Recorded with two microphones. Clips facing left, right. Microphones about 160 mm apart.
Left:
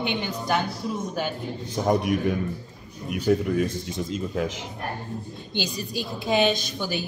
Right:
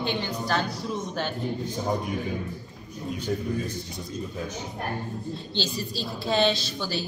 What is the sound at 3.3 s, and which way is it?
Speech, 70° left (ahead or behind).